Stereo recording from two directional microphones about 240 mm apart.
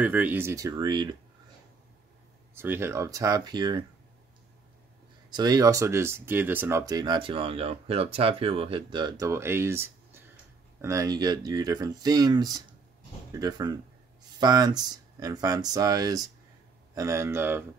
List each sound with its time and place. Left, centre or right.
0.0 s speech: centre
2.5 s speech: centre
5.3 s speech: centre